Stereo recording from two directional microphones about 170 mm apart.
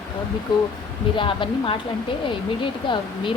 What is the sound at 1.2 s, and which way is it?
A woman's voice, 30° left (ahead or behind).